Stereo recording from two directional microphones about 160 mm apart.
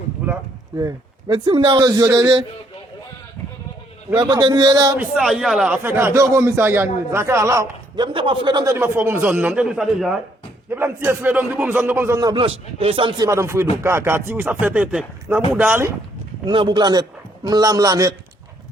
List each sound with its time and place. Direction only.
1.3 s a man's voice: 30° right (ahead or behind)
4.1 s a man's voice: 30° right (ahead or behind)
4.9 s a man's voice: 5° right (ahead or behind)
5.8 s a man's voice: 15° right (ahead or behind)
10.8 s a man's voice: 15° right (ahead or behind)
16.5 s a man's voice: 30° right (ahead or behind)